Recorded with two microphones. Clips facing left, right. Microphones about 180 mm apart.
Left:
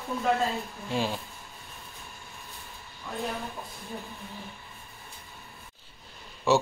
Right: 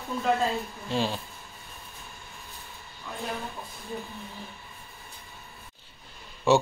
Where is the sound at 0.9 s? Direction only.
10° left (ahead or behind).